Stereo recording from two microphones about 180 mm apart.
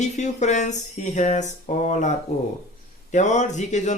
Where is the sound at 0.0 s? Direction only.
40° left (ahead or behind).